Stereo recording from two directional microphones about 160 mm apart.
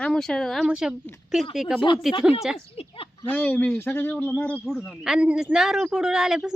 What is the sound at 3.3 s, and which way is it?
Speech, 10° left (ahead or behind).